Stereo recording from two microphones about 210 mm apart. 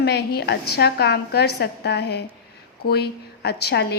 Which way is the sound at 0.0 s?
50° left (ahead or behind).